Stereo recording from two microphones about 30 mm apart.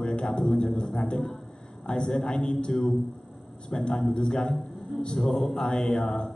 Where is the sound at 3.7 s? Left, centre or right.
Left.